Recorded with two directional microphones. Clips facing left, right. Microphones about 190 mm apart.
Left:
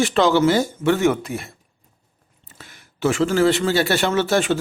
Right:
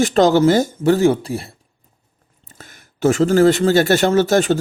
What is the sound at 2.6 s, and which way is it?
Speech, 45° right (ahead or behind).